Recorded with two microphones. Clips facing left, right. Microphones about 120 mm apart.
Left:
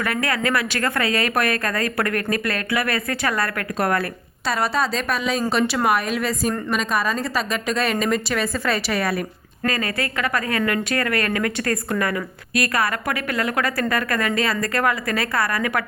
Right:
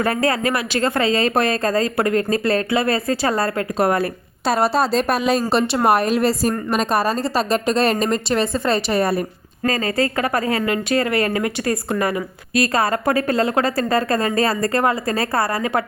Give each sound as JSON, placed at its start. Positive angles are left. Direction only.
{"t": 0.0, "sound": "speech", "side_deg": -30}
{"t": 4.4, "sound": "a woman's voice", "side_deg": -35}